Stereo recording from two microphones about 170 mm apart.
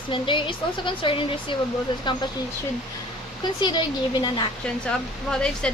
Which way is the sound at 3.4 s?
25° left (ahead or behind).